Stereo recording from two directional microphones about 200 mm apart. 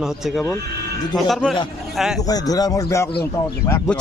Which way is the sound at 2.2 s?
20° left (ahead or behind).